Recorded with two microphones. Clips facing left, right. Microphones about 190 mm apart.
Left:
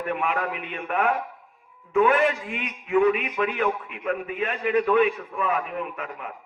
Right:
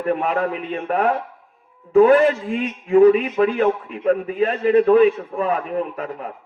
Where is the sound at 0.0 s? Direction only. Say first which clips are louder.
Right 6 dB; 35° right (ahead or behind).